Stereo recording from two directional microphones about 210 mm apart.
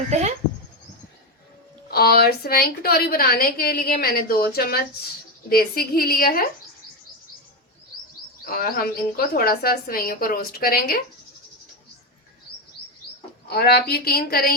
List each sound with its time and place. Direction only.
0.1 s speech: 35° right (ahead or behind)
1.9 s a woman's voice: 45° left (ahead or behind)
8.4 s a woman's voice: 45° left (ahead or behind)
13.5 s a woman's voice: 50° left (ahead or behind)